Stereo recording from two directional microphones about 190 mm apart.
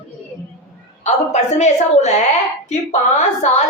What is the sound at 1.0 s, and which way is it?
A woman's voice, 35° left (ahead or behind).